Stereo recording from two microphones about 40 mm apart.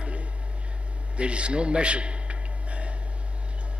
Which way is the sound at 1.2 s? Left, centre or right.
Right.